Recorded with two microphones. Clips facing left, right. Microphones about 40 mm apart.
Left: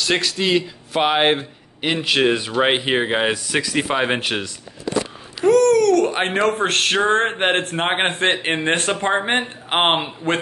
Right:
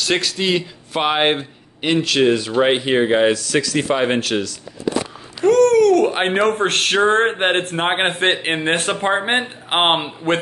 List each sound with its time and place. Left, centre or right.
0.0 s a man's voice: centre
2.0 s speech: centre
5.4 s speech: centre